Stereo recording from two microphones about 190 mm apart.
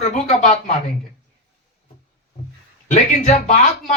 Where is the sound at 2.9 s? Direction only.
35° left (ahead or behind).